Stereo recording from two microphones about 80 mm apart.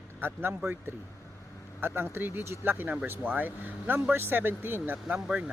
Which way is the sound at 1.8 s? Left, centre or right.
Right.